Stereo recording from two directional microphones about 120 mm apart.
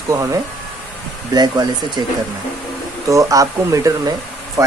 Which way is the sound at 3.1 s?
25° right (ahead or behind).